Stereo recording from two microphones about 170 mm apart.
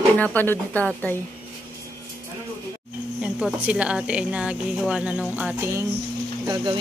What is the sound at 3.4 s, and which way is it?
Speech, 5° right (ahead or behind).